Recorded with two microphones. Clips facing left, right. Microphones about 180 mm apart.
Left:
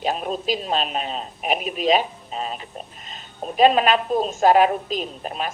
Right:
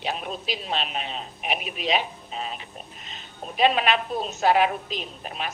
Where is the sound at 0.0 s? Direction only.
40° left (ahead or behind).